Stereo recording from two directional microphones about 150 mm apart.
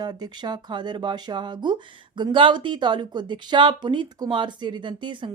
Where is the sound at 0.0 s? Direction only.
30° right (ahead or behind).